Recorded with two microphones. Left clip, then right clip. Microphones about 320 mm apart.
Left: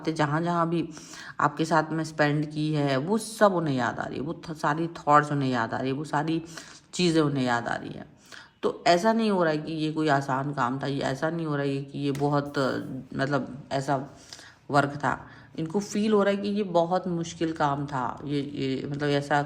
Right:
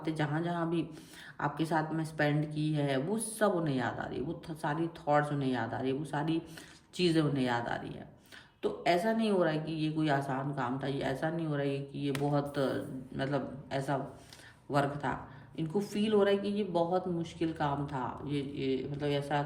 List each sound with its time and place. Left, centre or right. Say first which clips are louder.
0.0 s a woman's voice: left 8 dB; centre